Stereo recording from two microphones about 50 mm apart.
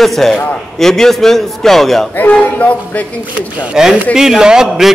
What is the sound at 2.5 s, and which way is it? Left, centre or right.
Speech, left.